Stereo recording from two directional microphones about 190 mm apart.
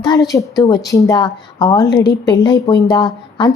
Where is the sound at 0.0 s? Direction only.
20° left (ahead or behind).